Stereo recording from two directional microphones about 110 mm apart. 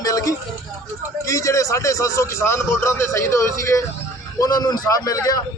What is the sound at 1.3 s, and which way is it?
A man's voice, 30° left (ahead or behind).